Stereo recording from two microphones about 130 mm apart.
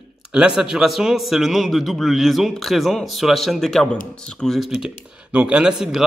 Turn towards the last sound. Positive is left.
turn(degrees=-5)  # may be behind; listen again after turning